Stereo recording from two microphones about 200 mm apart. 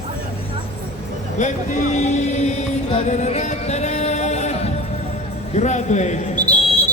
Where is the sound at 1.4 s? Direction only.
40° left (ahead or behind).